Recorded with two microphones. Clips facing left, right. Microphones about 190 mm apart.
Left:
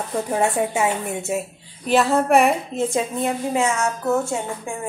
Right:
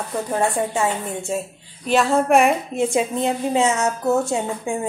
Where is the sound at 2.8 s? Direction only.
20° right (ahead or behind).